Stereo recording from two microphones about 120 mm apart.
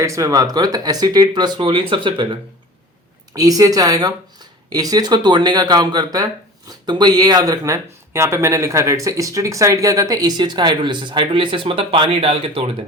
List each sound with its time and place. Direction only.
0.0 s speech: 25° right (ahead or behind); by 2.4 s 45° right (ahead or behind)
3.3 s speech: 30° right (ahead or behind); by 12.7 s 50° right (ahead or behind)